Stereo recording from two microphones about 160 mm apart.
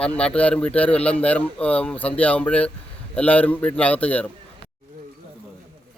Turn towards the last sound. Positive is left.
turn(degrees=10)  # may be behind; listen again after turning